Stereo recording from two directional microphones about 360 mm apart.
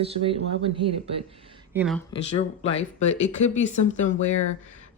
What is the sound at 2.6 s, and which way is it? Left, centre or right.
Speech, centre.